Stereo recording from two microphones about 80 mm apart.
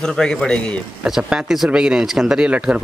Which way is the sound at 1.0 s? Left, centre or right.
Centre.